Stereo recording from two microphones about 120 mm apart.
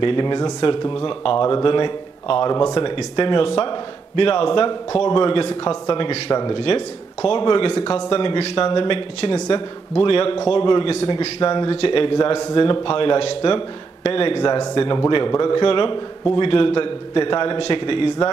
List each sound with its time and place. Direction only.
0.0 s a man's voice: 40° left (ahead or behind)
2.5 s a man's voice: 35° left (ahead or behind)